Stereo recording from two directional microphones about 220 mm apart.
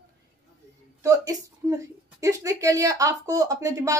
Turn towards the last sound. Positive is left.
turn(degrees=-15)  # may be behind; listen again after turning